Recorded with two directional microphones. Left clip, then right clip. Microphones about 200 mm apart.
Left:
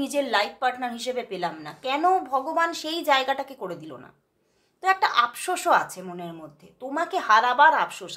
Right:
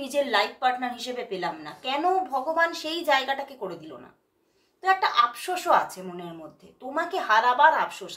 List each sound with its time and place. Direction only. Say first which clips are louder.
0.0 s a woman's voice: even; 35° left (ahead or behind)